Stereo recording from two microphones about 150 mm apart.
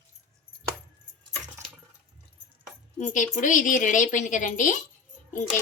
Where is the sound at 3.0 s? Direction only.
55° left (ahead or behind).